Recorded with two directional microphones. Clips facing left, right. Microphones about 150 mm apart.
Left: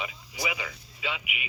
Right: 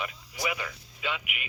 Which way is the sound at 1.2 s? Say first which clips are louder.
Left 2 dB; 90° left.